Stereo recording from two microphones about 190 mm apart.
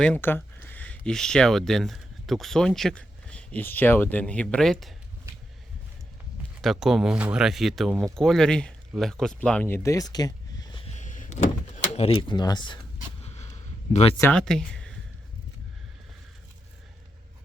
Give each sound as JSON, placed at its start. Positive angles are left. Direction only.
{"t": 0.0, "sound": "speech", "side_deg": 10}
{"t": 6.6, "sound": "speech", "side_deg": 0}
{"t": 10.8, "sound": "door", "side_deg": 40}
{"t": 13.2, "sound": "a sound", "side_deg": 35}
{"t": 13.9, "sound": "speech", "side_deg": 30}
{"t": 14.2, "sound": "speech", "side_deg": 5}